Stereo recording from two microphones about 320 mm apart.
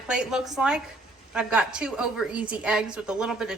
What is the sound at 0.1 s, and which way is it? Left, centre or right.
A woman's voice, centre.